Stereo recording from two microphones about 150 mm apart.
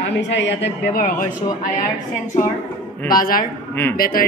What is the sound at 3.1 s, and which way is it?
A man's voice, 70° left (ahead or behind).